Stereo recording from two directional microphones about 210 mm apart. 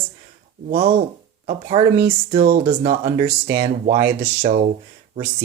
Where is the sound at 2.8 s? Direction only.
35° right (ahead or behind).